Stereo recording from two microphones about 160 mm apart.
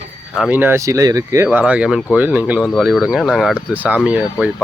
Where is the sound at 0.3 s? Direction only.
5° right (ahead or behind).